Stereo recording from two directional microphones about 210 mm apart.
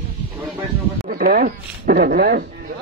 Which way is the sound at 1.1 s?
45° right (ahead or behind).